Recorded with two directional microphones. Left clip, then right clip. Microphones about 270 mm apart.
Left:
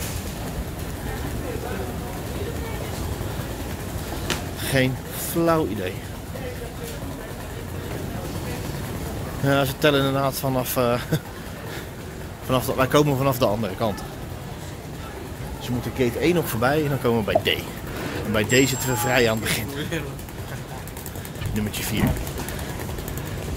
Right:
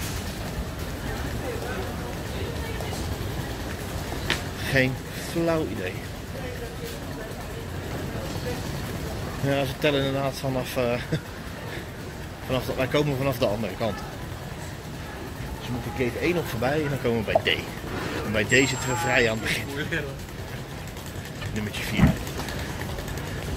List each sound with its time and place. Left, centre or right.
4.3 s vehicle: left
4.6 s speech: centre
9.5 s speech: left
12.4 s speech: left
16.0 s speech: left